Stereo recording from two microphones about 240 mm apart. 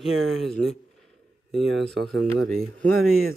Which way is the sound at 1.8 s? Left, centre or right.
Right.